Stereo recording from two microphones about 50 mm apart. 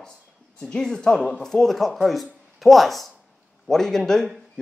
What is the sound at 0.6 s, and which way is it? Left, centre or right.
A woman's voice, centre.